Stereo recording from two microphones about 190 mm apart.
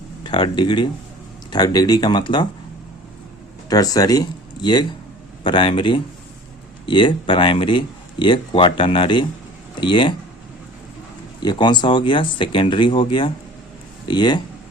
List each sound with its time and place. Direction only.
0.2 s speech: 25° left (ahead or behind)
3.7 s speech: 20° left (ahead or behind)
11.3 s speech: 25° left (ahead or behind)